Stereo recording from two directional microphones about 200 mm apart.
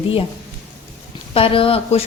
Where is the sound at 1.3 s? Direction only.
25° left (ahead or behind).